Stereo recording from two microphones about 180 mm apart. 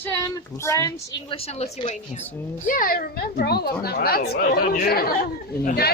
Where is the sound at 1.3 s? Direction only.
30° left (ahead or behind).